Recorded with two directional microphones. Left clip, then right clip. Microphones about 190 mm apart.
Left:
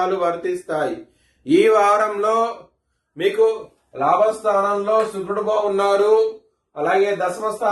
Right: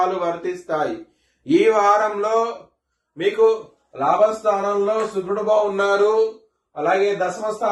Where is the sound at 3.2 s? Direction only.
35° left (ahead or behind).